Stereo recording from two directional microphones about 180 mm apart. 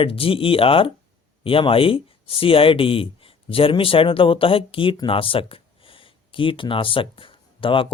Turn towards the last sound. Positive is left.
turn(degrees=30)  # may be behind; listen again after turning